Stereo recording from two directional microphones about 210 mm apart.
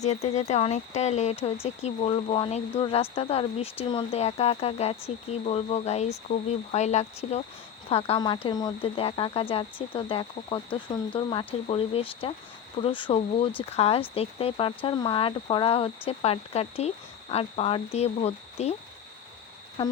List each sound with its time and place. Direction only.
0.0 s speech: 30° left (ahead or behind)